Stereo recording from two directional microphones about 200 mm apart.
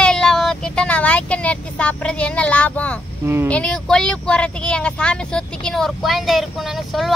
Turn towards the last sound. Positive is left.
turn(degrees=0)  # may be behind; listen again after turning